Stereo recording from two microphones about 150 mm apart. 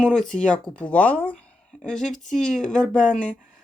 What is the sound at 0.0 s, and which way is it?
Speech, 5° left (ahead or behind).